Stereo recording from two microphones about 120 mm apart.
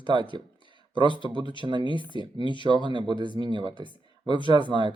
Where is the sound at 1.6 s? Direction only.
40° right (ahead or behind).